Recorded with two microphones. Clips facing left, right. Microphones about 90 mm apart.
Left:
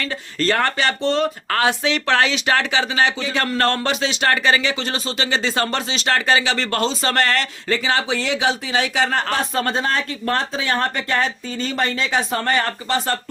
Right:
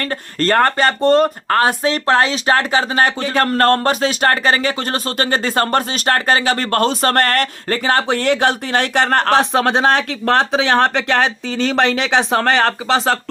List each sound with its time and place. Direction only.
0.0 s speech: 50° right (ahead or behind); by 13.1 s 85° right